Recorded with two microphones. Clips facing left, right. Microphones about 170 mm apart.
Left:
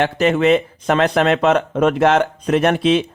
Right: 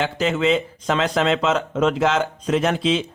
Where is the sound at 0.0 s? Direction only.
60° left (ahead or behind).